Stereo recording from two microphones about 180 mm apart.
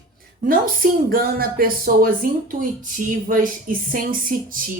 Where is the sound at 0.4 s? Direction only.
50° right (ahead or behind).